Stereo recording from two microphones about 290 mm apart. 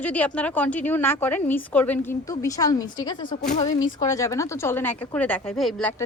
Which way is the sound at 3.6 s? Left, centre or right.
Left.